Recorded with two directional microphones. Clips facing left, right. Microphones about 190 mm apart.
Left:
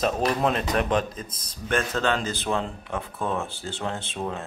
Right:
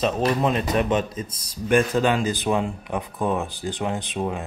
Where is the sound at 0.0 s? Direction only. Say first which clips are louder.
Right 2 dB; centre (ahead or behind).